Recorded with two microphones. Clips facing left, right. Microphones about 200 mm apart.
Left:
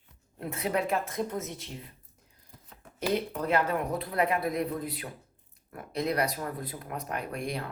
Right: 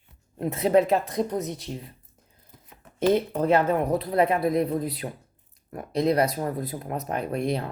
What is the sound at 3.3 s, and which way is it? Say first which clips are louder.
Speech: right 6 dB; 25° right (ahead or behind).